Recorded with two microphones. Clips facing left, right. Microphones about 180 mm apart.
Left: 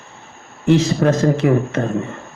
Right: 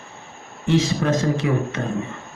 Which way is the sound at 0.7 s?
60° left (ahead or behind).